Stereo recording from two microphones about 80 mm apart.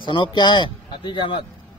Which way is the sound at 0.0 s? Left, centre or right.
Left.